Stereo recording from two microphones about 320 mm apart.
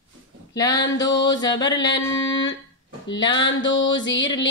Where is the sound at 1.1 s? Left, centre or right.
Left.